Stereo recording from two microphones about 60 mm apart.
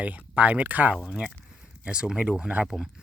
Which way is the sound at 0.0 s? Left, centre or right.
Right.